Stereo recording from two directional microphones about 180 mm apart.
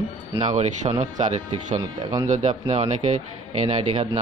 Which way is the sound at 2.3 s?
40° right (ahead or behind).